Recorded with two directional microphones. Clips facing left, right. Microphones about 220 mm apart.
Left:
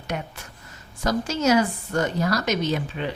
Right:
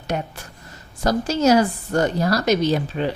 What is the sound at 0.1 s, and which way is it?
A woman's voice, 35° right (ahead or behind).